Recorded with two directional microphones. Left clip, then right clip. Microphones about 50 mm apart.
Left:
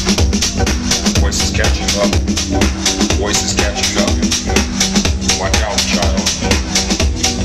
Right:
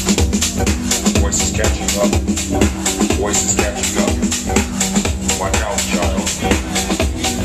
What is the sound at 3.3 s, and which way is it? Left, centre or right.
Music, left.